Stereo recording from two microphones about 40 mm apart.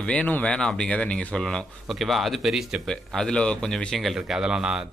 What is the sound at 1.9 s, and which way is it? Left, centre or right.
Speech, centre.